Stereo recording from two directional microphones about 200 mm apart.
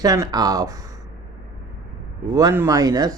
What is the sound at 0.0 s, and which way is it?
Speech, 20° right (ahead or behind).